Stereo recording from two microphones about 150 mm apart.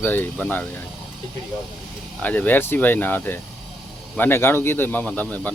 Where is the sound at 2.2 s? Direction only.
10° left (ahead or behind).